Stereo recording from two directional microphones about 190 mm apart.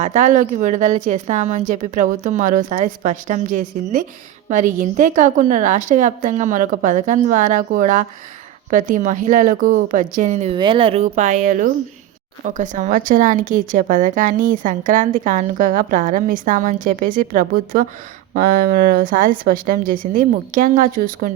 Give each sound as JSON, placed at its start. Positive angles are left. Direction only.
{"t": 0.0, "sound": "a woman's voice", "side_deg": -40}
{"t": 10.6, "sound": "a woman's voice", "side_deg": -25}